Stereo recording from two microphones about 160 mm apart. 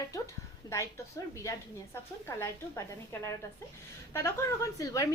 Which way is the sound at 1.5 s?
15° left (ahead or behind).